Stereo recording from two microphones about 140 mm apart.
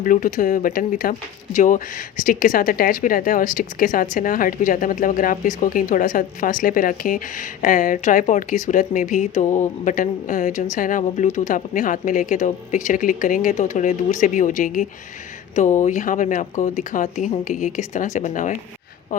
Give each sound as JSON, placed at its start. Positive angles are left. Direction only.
{"t": 0.0, "sound": "speech", "side_deg": 70}
{"t": 1.5, "sound": "speech", "side_deg": 65}